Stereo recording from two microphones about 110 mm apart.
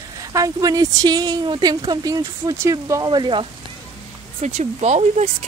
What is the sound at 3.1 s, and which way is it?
Speech, 45° right (ahead or behind).